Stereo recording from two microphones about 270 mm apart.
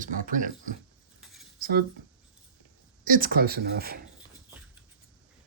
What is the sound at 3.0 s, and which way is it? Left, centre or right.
Speech, right.